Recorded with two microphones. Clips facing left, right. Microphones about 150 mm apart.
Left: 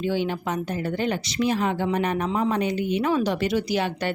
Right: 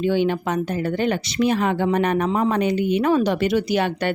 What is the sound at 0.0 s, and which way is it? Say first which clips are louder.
A woman's voice: right 5 dB; 60° right (ahead or behind).